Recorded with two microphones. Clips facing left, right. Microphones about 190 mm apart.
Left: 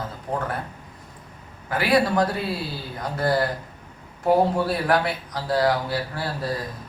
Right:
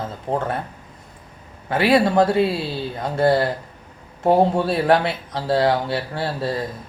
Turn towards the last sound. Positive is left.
turn(degrees=-25)  # may be behind; listen again after turning